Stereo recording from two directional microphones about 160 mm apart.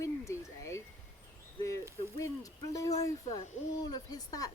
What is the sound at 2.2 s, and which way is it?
Speech, 20° left (ahead or behind).